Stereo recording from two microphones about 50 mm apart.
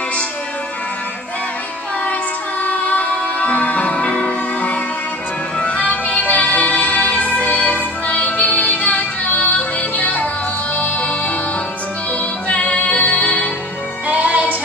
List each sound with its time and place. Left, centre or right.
2.6 s music: left
5.6 s music: left
12.4 s music: left
14.0 s music: right